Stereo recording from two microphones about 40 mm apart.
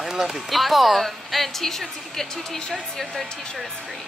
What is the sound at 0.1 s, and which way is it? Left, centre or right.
Speech, centre.